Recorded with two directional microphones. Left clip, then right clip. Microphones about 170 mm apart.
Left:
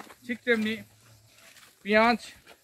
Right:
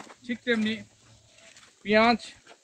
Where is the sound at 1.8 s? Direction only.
10° left (ahead or behind).